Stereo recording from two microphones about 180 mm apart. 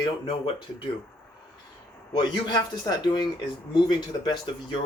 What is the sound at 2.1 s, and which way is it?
A man's voice, 25° left (ahead or behind).